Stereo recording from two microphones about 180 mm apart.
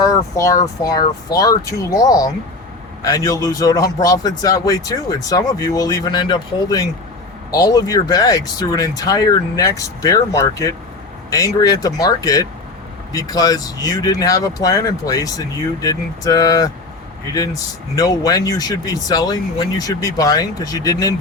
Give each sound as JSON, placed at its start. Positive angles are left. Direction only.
{"t": 0.0, "sound": "speech", "side_deg": 20}